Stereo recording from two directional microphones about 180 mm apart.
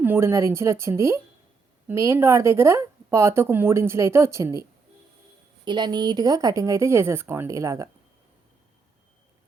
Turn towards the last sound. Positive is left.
turn(degrees=-15)  # may be behind; listen again after turning